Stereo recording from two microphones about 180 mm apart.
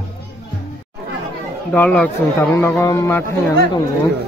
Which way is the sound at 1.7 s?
10° left (ahead or behind).